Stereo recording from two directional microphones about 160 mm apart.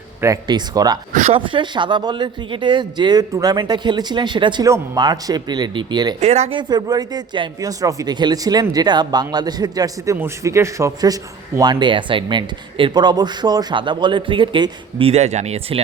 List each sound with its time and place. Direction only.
0.2 s speech: 20° right (ahead or behind)
1.1 s speech: 45° right (ahead or behind)
1.4 s speech: 30° right (ahead or behind)
6.1 s speech: 40° right (ahead or behind)
6.6 s speech: 25° right (ahead or behind)